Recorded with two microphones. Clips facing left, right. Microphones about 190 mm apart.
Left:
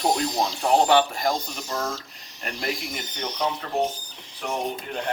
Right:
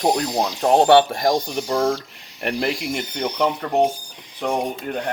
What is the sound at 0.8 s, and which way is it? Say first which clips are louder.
Speech: right 6 dB; 55° right (ahead or behind).